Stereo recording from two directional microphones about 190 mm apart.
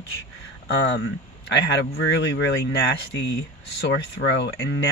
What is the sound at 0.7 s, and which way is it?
Speech, 65° left (ahead or behind).